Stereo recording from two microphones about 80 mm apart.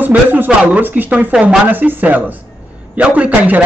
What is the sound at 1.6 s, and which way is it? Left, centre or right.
Speech, right.